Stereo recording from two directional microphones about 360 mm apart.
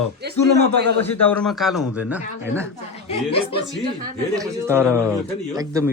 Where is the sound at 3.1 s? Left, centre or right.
Centre.